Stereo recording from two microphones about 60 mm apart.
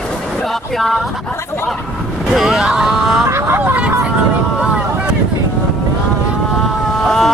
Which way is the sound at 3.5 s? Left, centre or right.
Right.